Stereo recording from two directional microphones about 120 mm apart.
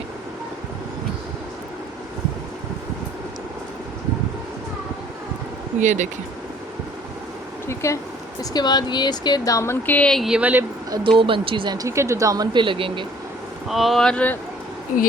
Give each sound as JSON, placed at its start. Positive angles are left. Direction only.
{"t": 5.8, "sound": "speech", "side_deg": -90}
{"t": 7.7, "sound": "a sound", "side_deg": 25}
{"t": 8.4, "sound": "speech", "side_deg": 35}
{"t": 11.2, "sound": "speech", "side_deg": -45}
{"t": 13.7, "sound": "speech", "side_deg": 0}